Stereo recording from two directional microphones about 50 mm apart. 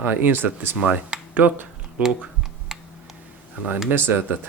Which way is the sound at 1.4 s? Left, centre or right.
Right.